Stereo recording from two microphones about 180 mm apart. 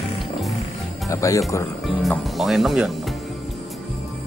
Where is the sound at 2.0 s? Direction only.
Centre (ahead or behind).